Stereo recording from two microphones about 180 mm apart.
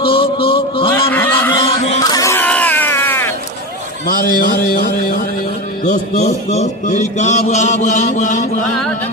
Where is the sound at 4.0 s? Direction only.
50° left (ahead or behind).